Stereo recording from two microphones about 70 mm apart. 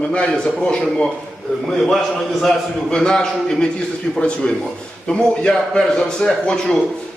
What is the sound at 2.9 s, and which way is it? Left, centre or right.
A man's voice, centre.